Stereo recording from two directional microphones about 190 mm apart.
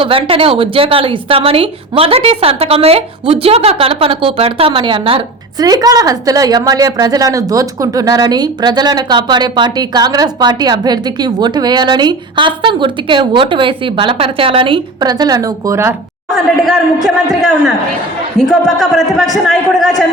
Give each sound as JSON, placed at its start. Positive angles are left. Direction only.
{"t": 0.0, "sound": "a woman's voice", "side_deg": -30}
{"t": 16.3, "sound": "a man's voice", "side_deg": 0}
{"t": 18.6, "sound": "a man's voice", "side_deg": 0}